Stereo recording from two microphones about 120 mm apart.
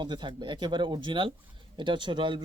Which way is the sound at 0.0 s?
40° right (ahead or behind).